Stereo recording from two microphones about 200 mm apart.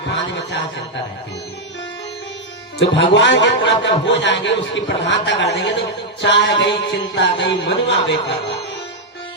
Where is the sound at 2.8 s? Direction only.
65° left (ahead or behind).